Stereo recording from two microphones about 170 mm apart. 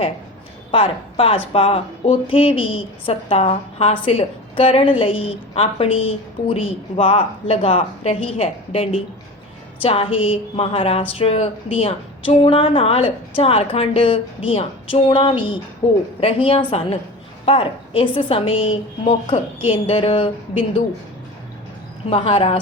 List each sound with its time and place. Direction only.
0.7 s speech: 30° left (ahead or behind)
22.1 s speech: 35° left (ahead or behind)